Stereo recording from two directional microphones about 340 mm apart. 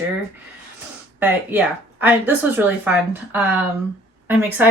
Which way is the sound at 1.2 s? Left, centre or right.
Centre.